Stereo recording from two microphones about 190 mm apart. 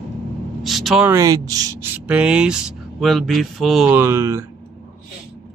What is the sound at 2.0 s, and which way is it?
Speech, 5° right (ahead or behind).